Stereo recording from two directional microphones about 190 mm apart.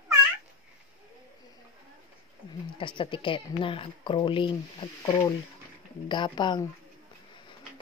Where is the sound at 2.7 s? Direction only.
25° left (ahead or behind).